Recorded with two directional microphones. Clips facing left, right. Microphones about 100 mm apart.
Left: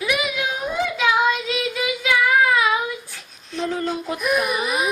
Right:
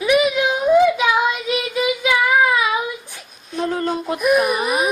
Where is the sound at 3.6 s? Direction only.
45° right (ahead or behind).